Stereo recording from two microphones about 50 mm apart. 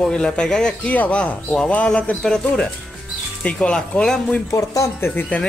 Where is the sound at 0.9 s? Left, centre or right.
Left.